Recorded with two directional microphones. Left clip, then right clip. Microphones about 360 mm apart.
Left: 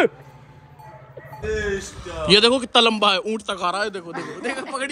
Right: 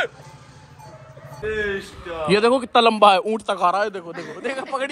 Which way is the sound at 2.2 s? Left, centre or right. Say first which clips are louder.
Left 2 dB; centre.